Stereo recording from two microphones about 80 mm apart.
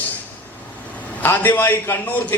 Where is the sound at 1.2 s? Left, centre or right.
Left.